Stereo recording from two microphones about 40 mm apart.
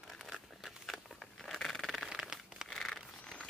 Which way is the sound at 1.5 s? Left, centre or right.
Centre.